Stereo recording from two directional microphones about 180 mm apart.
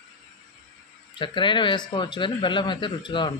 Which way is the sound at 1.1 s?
25° left (ahead or behind).